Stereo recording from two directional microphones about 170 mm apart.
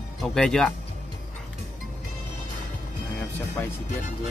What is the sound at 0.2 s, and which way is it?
Speech, 5° left (ahead or behind).